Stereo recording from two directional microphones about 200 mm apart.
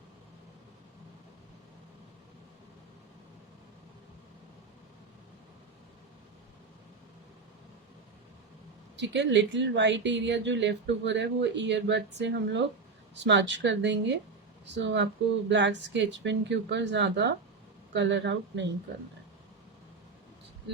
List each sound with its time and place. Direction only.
9.0 s speech: 60° right (ahead or behind)